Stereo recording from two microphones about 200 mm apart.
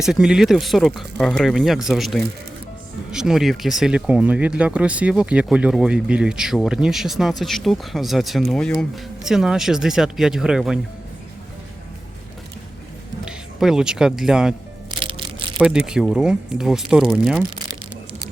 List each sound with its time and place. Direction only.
0.0 s speech: 5° right (ahead or behind)
13.2 s speech: 5° right (ahead or behind)
14.9 s music: 25° right (ahead or behind)
15.5 s speech: 5° right (ahead or behind)